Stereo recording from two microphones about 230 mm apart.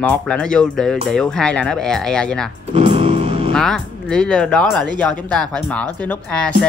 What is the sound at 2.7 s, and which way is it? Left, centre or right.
Music, right.